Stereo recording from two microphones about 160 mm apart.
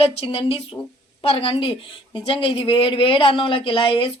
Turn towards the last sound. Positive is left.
turn(degrees=35)  # may be behind; listen again after turning